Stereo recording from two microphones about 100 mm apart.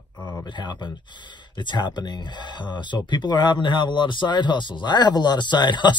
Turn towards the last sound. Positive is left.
turn(degrees=50)  # may be behind; listen again after turning